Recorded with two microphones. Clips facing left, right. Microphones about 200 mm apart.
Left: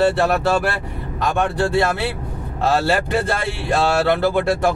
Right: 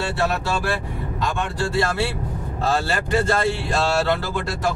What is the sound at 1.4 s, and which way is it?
Speech, 60° left (ahead or behind).